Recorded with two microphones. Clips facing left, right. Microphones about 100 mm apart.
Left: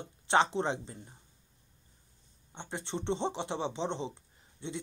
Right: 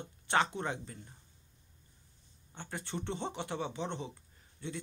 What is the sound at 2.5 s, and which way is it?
Speech, 25° left (ahead or behind).